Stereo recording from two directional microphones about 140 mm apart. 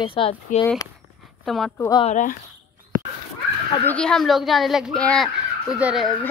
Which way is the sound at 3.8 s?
5° left (ahead or behind).